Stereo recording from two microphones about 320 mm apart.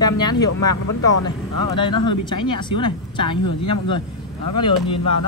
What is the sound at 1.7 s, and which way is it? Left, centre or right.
Speech, centre.